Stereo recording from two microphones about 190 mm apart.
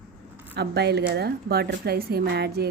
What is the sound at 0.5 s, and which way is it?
Speech, 60° right (ahead or behind).